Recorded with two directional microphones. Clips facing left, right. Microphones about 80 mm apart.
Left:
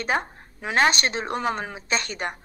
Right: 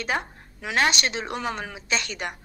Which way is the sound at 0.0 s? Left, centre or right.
Left.